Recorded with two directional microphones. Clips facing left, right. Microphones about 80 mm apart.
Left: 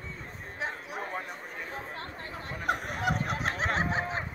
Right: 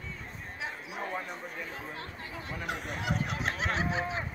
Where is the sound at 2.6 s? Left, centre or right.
Left.